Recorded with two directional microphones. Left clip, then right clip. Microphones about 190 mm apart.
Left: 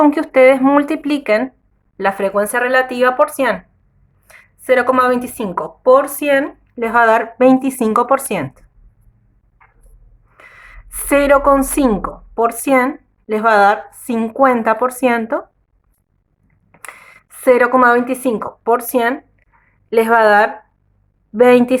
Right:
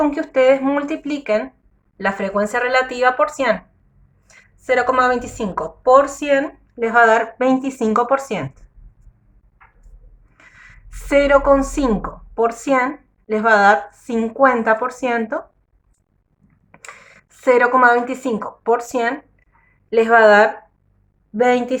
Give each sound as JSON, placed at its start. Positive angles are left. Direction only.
{"t": 0.0, "sound": "speech", "side_deg": 45}
{"t": 10.3, "sound": "a woman's voice", "side_deg": 35}
{"t": 16.7, "sound": "speech", "side_deg": 30}
{"t": 21.3, "sound": "speech", "side_deg": 35}